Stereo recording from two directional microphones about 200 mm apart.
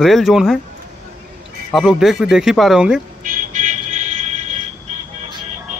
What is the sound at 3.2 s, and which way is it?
Vehicle, 40° right (ahead or behind).